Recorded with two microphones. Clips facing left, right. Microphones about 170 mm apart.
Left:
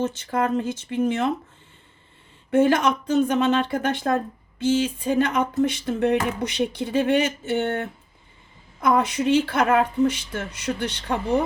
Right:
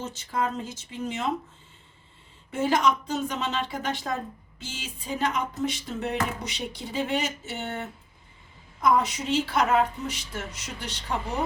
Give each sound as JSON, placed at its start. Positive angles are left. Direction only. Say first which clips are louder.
{"t": 0.0, "sound": "music", "louder": "left 6 dB", "side_deg": 55}
{"t": 2.5, "sound": "music", "louder": "left 5 dB", "side_deg": 60}